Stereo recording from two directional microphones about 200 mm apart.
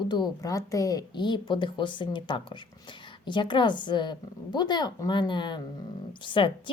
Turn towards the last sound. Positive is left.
turn(degrees=25)  # may be behind; listen again after turning